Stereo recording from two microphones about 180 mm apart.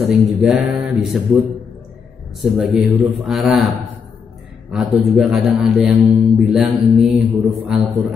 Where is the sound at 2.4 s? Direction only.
Centre (ahead or behind).